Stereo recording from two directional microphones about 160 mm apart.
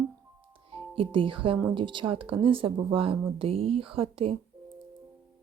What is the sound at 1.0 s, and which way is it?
Speech, 35° right (ahead or behind).